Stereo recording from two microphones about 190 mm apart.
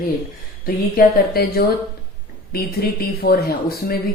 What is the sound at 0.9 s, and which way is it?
Speech, 55° left (ahead or behind).